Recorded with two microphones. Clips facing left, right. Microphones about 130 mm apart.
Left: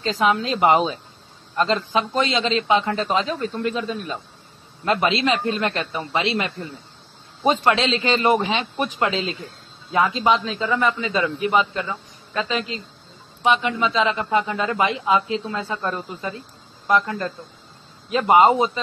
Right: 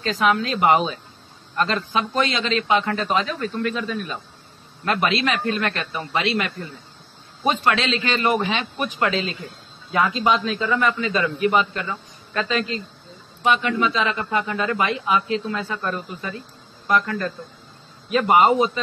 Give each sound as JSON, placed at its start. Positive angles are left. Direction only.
{"t": 0.0, "sound": "a man's voice", "side_deg": 25}
{"t": 0.5, "sound": "a man's voice", "side_deg": 15}